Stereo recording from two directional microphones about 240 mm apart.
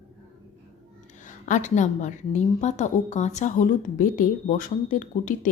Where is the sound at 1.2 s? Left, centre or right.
Left.